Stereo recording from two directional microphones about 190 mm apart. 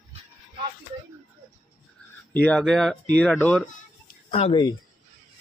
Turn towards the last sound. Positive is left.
turn(degrees=25)  # may be behind; listen again after turning